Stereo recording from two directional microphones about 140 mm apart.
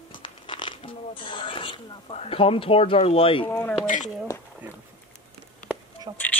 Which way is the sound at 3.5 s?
10° left (ahead or behind).